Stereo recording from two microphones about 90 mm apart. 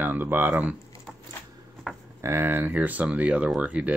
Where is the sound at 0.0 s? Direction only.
20° right (ahead or behind).